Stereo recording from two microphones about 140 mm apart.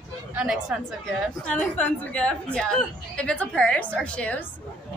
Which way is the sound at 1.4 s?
10° left (ahead or behind).